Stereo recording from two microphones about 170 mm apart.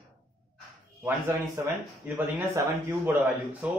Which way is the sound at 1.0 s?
15° right (ahead or behind).